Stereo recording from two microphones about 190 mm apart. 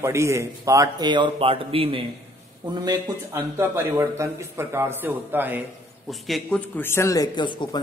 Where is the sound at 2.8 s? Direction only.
15° right (ahead or behind).